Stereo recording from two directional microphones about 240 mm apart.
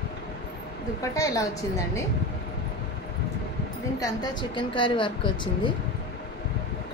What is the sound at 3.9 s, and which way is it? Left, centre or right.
A woman's voice, centre.